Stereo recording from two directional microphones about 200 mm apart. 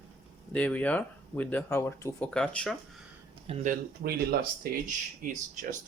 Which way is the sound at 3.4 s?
35° right (ahead or behind).